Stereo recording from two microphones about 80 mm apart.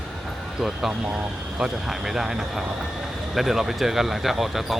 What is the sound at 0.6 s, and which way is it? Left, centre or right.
Speech, centre.